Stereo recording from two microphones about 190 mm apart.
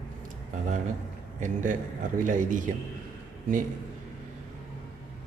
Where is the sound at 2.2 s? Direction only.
45° right (ahead or behind).